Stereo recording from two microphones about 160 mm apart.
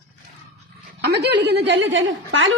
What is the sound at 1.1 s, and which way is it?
Speech, 90° right.